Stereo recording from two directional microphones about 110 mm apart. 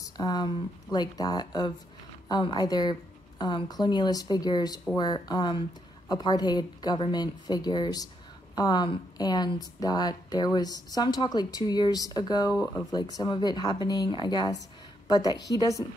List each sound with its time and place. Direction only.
0.2 s a woman's voice: 35° left (ahead or behind)